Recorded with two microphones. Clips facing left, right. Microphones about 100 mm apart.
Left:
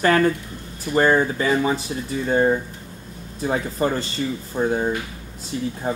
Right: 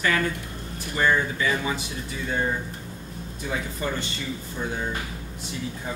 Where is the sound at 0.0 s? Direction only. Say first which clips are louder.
Left 7 dB; 40° left (ahead or behind).